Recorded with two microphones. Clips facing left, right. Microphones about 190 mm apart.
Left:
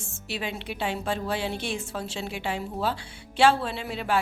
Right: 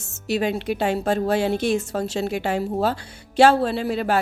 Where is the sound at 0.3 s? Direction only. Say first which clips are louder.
Right 11 dB; 45° right (ahead or behind).